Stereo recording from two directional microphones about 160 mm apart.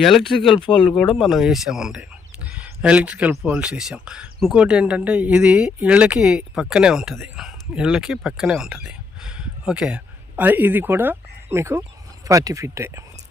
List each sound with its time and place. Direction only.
0.0 s speech: centre (ahead or behind); by 13.0 s 15° right (ahead or behind)